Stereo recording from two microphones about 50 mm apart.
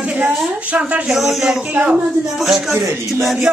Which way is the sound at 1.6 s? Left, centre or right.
Right.